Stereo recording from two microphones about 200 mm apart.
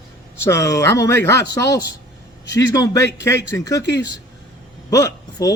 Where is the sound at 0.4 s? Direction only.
15° left (ahead or behind).